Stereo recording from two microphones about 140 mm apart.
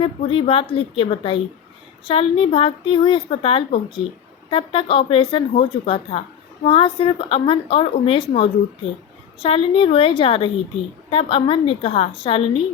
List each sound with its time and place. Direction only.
0.0 s a woman's voice: 40° left (ahead or behind)